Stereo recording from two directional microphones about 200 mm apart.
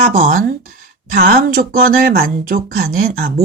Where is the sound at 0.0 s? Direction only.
35° right (ahead or behind).